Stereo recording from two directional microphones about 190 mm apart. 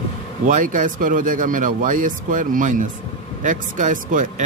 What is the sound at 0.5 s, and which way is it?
A man's voice, 40° right (ahead or behind).